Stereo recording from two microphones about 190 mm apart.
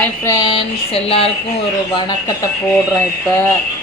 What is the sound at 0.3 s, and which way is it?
A woman's voice, 20° left (ahead or behind).